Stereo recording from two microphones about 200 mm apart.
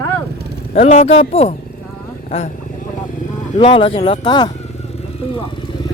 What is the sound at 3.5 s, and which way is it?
Speech, 25° left (ahead or behind).